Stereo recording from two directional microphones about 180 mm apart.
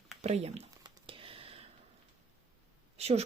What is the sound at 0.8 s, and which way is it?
Computer keyboard, 30° right (ahead or behind).